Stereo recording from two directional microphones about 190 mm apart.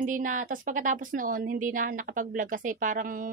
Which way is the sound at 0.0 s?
45° right (ahead or behind).